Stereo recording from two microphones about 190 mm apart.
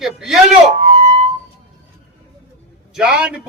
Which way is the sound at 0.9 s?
40° right (ahead or behind).